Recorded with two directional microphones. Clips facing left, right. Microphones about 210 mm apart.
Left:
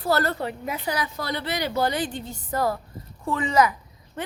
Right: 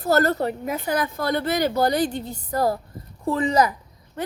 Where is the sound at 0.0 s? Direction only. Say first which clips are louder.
Right 4 dB; 45° right (ahead or behind).